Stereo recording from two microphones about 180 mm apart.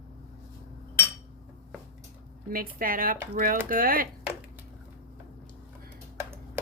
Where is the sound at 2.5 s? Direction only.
50° right (ahead or behind).